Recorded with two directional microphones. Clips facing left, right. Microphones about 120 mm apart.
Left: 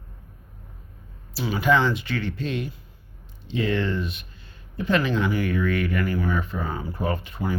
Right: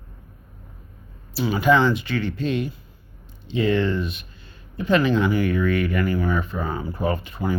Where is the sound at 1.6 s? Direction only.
10° right (ahead or behind).